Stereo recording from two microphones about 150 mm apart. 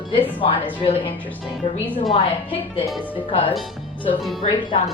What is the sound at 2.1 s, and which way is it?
A woman's voice, 35° left (ahead or behind).